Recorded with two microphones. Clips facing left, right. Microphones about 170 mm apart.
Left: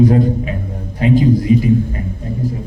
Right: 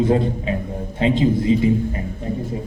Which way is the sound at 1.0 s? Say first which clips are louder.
Left 4 dB; 25° right (ahead or behind).